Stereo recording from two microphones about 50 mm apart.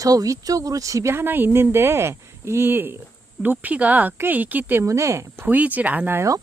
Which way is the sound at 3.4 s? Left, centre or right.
Right.